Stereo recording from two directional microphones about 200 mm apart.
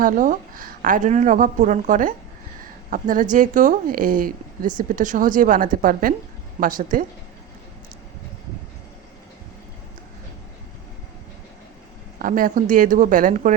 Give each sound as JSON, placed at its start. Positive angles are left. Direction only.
{"t": 0.0, "sound": "a woman's voice", "side_deg": -40}
{"t": 12.2, "sound": "a woman's voice", "side_deg": -40}